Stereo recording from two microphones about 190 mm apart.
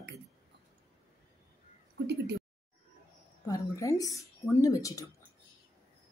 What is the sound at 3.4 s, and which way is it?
Speech, 15° left (ahead or behind).